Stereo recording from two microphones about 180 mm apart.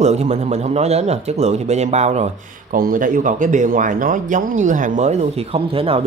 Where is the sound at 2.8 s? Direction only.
50° right (ahead or behind).